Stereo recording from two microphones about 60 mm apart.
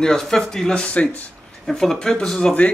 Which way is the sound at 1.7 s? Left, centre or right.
Centre.